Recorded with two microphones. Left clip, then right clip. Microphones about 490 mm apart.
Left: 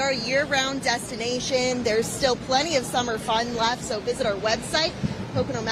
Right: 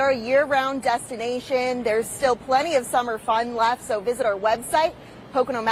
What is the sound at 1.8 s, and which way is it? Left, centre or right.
A woman's voice, right.